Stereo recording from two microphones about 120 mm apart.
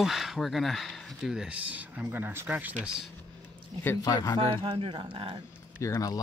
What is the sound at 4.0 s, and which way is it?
Speech, 30° left (ahead or behind).